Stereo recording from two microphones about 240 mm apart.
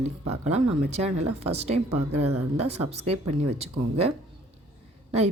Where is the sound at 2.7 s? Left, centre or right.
Right.